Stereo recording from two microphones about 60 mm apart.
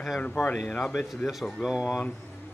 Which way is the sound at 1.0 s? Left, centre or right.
Centre.